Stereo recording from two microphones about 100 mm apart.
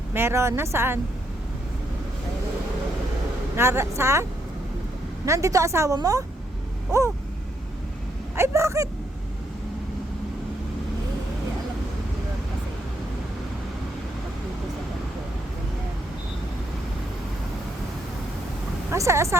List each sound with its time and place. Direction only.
0.1 s a woman's voice: 25° right (ahead or behind)
3.5 s a woman's voice: 25° right (ahead or behind)
8.4 s a woman's voice: 30° right (ahead or behind)
18.9 s speech: 30° right (ahead or behind)